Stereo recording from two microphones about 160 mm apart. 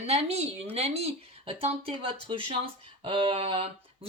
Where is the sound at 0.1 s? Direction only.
40° right (ahead or behind).